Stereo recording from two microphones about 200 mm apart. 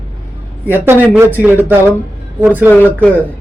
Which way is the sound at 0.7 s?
10° right (ahead or behind).